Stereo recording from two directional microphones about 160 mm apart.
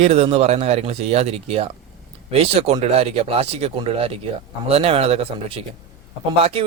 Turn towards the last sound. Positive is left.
turn(degrees=-40)  # may be behind; listen again after turning